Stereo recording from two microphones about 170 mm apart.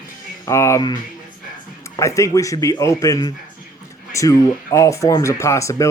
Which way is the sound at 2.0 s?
20° left (ahead or behind).